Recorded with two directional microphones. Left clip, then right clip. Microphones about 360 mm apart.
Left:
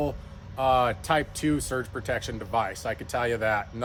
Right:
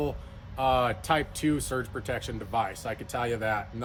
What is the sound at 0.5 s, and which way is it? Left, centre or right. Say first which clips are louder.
Speech: left 2 dB; centre.